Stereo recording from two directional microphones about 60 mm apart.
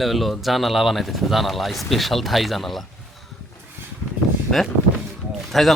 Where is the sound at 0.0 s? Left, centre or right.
Centre.